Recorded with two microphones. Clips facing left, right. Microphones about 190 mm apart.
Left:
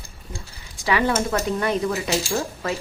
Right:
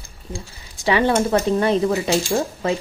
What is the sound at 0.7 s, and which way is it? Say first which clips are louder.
Speech: right 4 dB; 25° right (ahead or behind).